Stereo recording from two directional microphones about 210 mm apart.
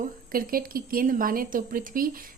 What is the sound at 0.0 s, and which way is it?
Speech, 45° right (ahead or behind).